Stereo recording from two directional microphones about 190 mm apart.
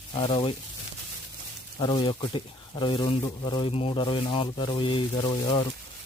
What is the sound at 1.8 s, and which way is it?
Speech, 25° left (ahead or behind).